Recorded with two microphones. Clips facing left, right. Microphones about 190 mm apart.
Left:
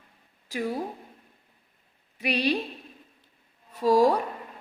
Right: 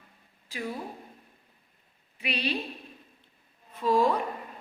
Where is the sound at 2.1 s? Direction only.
40° left (ahead or behind).